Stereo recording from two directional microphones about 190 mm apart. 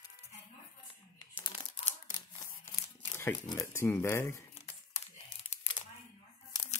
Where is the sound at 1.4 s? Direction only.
30° left (ahead or behind).